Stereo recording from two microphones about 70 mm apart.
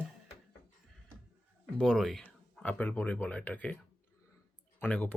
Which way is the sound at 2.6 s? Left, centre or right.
Left.